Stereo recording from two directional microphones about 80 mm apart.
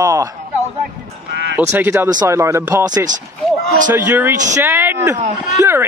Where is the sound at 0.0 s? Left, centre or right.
Right.